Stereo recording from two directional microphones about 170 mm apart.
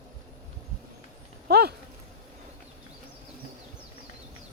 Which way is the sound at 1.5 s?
70° right (ahead or behind).